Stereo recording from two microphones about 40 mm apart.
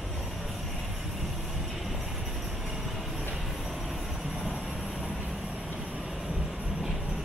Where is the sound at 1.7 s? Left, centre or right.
Centre.